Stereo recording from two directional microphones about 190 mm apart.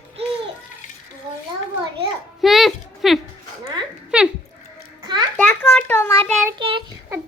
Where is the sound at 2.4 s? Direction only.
Centre (ahead or behind).